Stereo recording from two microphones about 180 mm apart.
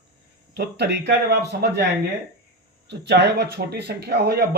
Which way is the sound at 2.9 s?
70° right (ahead or behind).